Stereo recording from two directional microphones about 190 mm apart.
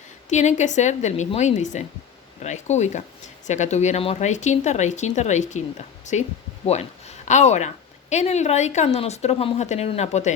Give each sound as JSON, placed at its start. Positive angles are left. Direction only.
{"t": 0.3, "sound": "a woman's voice", "side_deg": 40}